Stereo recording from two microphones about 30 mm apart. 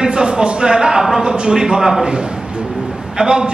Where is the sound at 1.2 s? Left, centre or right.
Right.